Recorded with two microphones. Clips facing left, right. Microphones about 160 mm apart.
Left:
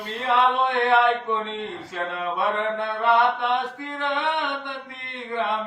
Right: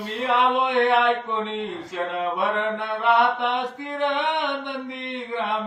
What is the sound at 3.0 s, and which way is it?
Chant, 20° right (ahead or behind).